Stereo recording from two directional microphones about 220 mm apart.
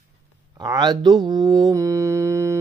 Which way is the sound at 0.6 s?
20° right (ahead or behind).